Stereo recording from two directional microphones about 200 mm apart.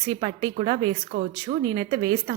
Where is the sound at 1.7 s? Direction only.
25° right (ahead or behind).